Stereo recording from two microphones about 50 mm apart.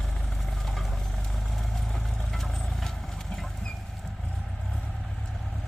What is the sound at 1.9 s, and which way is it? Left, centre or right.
Vehicle, centre.